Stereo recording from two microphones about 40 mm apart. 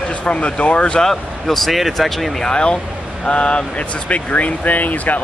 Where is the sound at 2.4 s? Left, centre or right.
Left.